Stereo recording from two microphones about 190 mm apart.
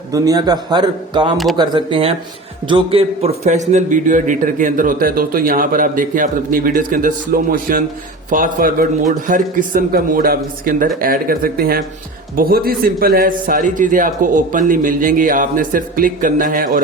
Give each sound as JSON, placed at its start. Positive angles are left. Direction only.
{"t": 0.1, "sound": "a man's voice", "side_deg": -20}